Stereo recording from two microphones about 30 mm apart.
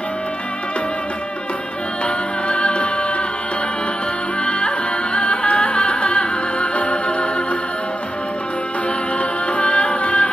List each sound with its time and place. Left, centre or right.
2.0 s music: left
4.5 s music: left
9.2 s music: left